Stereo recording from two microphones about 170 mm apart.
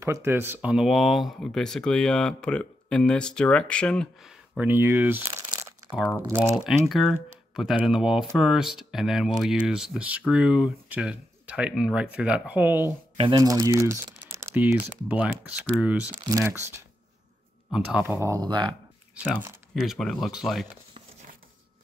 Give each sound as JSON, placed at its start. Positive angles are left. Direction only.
{"t": 0.0, "sound": "speech", "side_deg": -15}
{"t": 6.9, "sound": "speech", "side_deg": 0}
{"t": 19.7, "sound": "speech", "side_deg": 0}